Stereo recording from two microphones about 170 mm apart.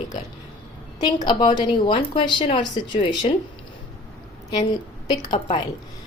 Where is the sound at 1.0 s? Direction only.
25° left (ahead or behind).